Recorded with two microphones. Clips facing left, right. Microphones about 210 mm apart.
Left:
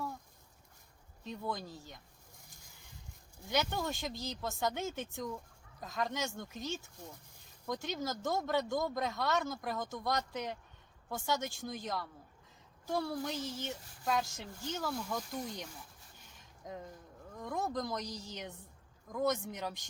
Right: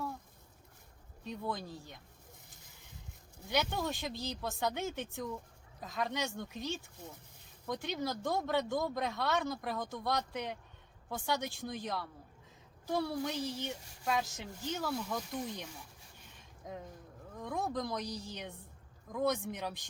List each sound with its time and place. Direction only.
1.3 s speech: centre (ahead or behind)
3.4 s speech: centre (ahead or behind)